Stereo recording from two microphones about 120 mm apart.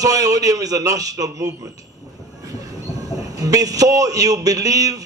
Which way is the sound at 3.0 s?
30° right (ahead or behind).